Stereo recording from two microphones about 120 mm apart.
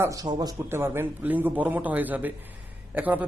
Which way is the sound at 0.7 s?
20° right (ahead or behind).